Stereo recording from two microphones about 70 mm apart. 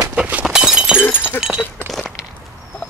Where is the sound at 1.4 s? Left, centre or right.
Centre.